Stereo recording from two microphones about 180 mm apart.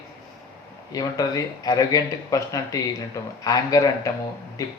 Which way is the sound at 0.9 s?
20° left (ahead or behind).